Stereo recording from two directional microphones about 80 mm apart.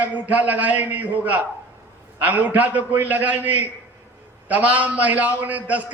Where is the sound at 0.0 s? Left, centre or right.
Right.